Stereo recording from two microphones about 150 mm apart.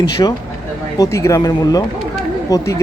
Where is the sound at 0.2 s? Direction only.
25° left (ahead or behind).